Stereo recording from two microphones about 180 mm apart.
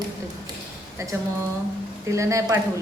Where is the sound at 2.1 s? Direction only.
15° right (ahead or behind).